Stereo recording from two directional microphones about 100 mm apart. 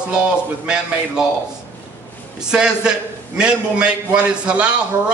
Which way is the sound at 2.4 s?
10° right (ahead or behind).